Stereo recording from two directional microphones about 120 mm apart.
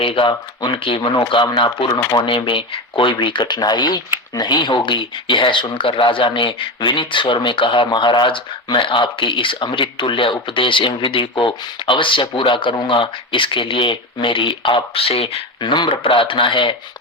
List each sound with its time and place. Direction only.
0.0 s speech: 50° left (ahead or behind)